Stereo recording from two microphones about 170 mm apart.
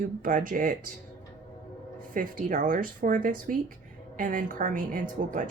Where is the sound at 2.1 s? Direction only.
50° right (ahead or behind).